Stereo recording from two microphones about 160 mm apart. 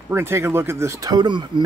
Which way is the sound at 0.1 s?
15° right (ahead or behind).